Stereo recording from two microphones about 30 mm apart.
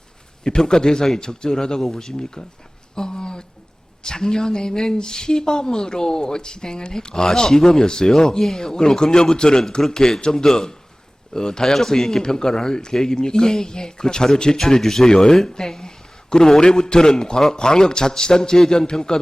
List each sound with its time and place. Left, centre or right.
0.4 s speech: left
2.9 s a sound: left
4.0 s speech: left
14.6 s a man's voice: centre